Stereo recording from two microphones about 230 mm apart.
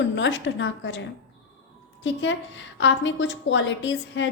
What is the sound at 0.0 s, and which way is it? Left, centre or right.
A woman's voice, left.